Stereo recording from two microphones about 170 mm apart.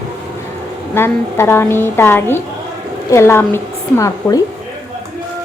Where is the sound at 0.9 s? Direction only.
15° left (ahead or behind).